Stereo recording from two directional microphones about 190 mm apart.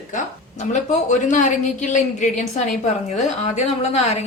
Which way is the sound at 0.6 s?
40° left (ahead or behind).